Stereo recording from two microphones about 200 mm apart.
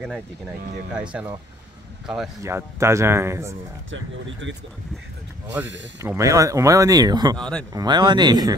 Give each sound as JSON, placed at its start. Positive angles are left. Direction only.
{"t": 0.0, "sound": "speech", "side_deg": 0}
{"t": 2.4, "sound": "speech", "side_deg": -15}
{"t": 3.9, "sound": "speech", "side_deg": -70}
{"t": 5.9, "sound": "speech", "side_deg": -15}
{"t": 7.3, "sound": "speech", "side_deg": 5}
{"t": 7.7, "sound": "speech", "side_deg": -20}